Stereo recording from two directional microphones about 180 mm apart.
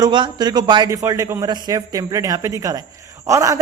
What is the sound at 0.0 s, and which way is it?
A man's voice, 25° right (ahead or behind).